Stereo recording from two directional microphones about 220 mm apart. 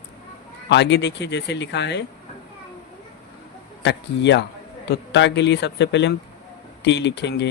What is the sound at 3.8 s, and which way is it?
Speech, 50° left (ahead or behind).